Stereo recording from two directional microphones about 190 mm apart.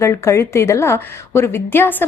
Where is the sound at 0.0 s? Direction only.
15° left (ahead or behind).